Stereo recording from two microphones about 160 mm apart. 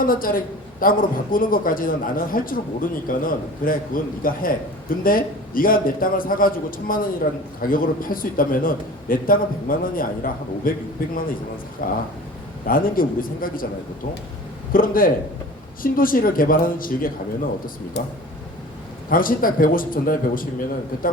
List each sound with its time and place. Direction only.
0.0 s a man's voice: 60° left (ahead or behind)
14.7 s a man's voice: 60° left (ahead or behind)
18.0 s speech: 90° left
19.1 s a man's voice: 60° left (ahead or behind)